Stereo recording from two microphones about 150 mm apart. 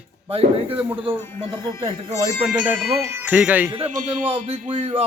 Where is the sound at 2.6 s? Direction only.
10° right (ahead or behind).